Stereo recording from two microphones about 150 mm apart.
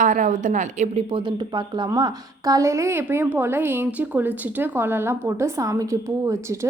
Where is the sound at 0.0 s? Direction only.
60° right (ahead or behind).